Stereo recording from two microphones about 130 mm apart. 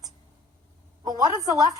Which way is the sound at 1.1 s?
30° right (ahead or behind).